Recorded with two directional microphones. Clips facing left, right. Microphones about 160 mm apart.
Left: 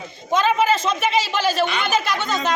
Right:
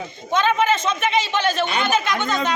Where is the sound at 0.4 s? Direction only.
5° left (ahead or behind).